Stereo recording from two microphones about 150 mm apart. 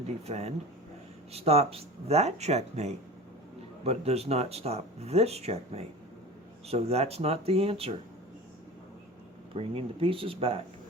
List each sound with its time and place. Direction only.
0.3 s speech: 45° right (ahead or behind)
9.6 s speech: 40° right (ahead or behind)